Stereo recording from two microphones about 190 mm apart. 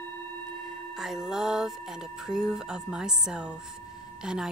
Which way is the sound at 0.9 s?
Centre (ahead or behind).